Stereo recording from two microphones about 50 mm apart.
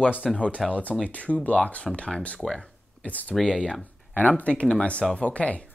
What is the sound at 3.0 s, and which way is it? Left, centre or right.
Speech, left.